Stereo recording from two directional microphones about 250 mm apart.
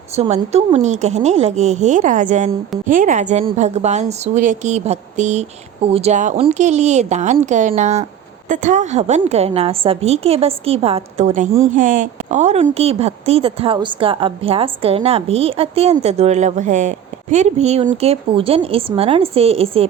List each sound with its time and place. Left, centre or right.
0.2 s a woman's voice: right